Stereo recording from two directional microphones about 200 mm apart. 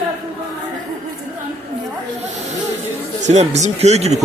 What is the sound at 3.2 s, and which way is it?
Speech, 35° right (ahead or behind).